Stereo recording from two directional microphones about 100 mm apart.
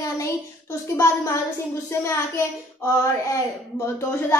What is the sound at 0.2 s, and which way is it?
A woman's voice, 25° left (ahead or behind).